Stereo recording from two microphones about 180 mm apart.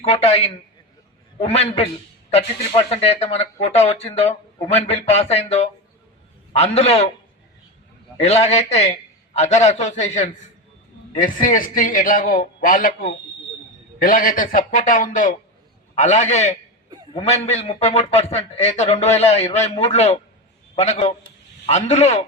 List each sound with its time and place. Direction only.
0.0 s speech: 35° left (ahead or behind)
8.2 s a man's voice: 35° left (ahead or behind)
14.0 s a man's voice: 50° left (ahead or behind)